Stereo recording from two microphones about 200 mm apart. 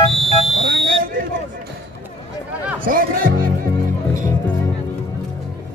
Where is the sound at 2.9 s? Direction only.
45° right (ahead or behind).